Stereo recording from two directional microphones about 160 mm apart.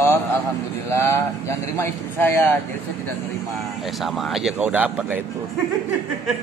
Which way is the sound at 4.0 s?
Centre (ahead or behind).